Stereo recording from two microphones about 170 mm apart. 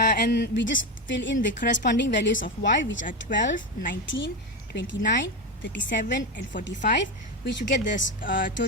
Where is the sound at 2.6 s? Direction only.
90° left.